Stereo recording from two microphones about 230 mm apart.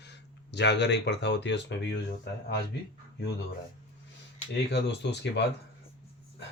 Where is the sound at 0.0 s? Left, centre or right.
Left.